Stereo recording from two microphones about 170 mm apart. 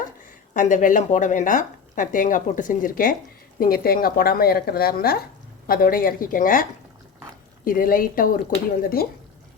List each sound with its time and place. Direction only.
0.5 s speech: 50° left (ahead or behind)